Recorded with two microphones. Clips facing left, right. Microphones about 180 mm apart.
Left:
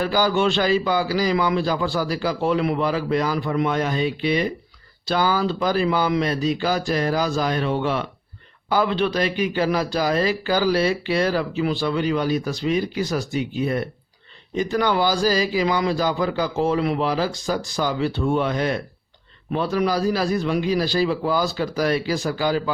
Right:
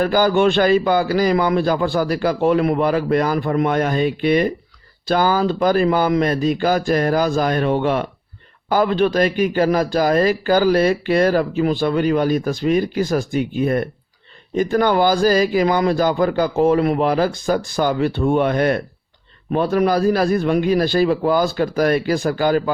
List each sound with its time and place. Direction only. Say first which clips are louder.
0.0 s a man's voice: right 5 dB; 50° right (ahead or behind)